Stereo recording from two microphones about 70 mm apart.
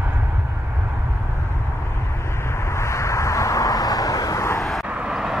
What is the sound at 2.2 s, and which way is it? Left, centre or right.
Vehicle, left.